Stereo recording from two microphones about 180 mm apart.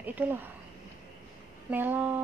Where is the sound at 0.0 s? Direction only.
10° right (ahead or behind).